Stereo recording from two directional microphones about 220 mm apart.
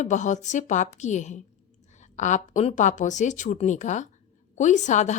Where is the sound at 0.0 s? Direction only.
35° left (ahead or behind).